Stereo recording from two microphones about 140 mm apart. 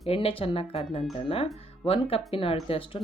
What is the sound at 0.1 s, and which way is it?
Speech, 40° left (ahead or behind).